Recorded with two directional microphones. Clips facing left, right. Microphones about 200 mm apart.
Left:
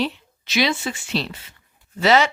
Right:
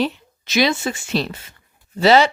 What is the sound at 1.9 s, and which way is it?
Speech, 35° right (ahead or behind).